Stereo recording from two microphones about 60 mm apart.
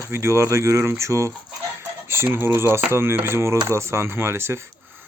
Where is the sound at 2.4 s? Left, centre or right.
Right.